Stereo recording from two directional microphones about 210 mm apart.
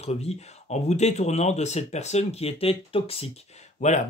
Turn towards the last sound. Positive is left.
turn(degrees=35)  # may be behind; listen again after turning